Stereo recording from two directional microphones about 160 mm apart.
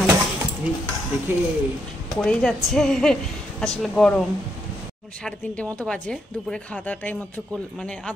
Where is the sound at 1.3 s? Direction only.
15° right (ahead or behind).